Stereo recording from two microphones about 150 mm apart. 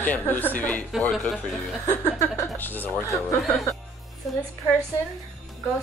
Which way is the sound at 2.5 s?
10° left (ahead or behind).